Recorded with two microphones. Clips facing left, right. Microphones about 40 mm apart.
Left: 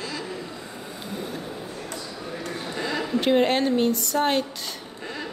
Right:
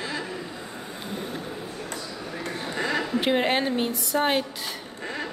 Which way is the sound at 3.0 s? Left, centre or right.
Centre.